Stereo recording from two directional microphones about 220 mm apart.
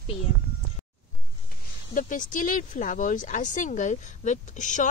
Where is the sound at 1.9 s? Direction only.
35° left (ahead or behind).